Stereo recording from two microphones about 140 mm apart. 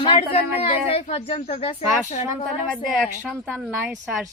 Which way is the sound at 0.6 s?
50° left (ahead or behind).